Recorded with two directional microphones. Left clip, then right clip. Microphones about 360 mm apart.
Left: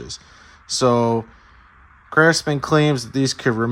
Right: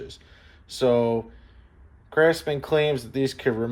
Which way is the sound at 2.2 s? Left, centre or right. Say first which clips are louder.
Left 5 dB; centre.